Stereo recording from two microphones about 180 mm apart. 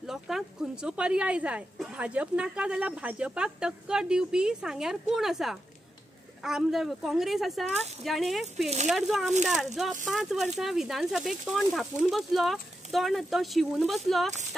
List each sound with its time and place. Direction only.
0.0 s speech: centre (ahead or behind)
8.6 s speech: 40° right (ahead or behind)
8.9 s speech: centre (ahead or behind)